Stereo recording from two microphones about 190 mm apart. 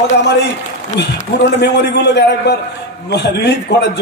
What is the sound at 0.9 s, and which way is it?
A man's voice, 65° left (ahead or behind).